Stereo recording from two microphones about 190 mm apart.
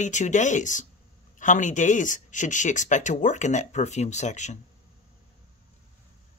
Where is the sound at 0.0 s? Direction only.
40° left (ahead or behind).